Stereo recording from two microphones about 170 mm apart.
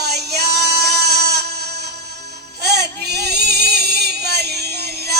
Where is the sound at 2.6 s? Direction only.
75° right (ahead or behind).